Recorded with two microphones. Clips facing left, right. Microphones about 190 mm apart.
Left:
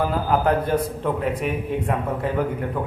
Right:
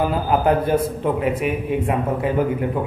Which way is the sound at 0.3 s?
10° right (ahead or behind).